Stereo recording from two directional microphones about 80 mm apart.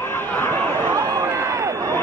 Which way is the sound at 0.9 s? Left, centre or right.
Right.